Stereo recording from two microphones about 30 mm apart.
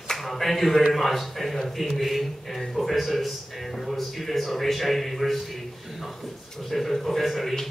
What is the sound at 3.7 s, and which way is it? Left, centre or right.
A man's voice, centre.